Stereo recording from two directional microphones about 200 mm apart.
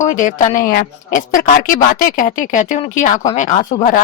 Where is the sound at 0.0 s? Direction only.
40° left (ahead or behind).